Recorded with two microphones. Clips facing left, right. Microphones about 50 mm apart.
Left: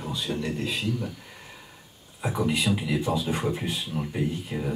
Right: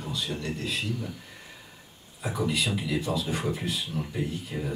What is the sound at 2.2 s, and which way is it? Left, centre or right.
Speech, centre.